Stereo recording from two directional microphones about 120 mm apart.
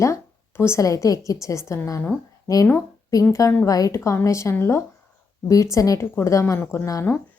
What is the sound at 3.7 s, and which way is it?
A woman's voice, 30° left (ahead or behind).